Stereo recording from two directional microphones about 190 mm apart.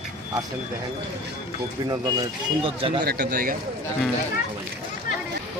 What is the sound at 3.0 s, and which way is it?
Speech, 55° right (ahead or behind).